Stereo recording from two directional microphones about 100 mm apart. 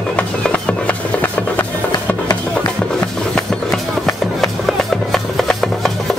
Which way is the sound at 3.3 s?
5° left (ahead or behind).